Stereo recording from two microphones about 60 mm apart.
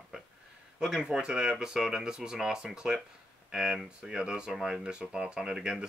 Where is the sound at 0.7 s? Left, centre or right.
Centre.